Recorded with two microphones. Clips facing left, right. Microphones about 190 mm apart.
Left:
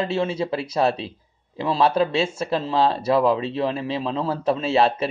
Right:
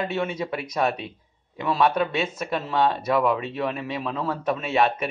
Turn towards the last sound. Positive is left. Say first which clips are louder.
# left 3 dB
turn(degrees=30)  # may be behind; listen again after turning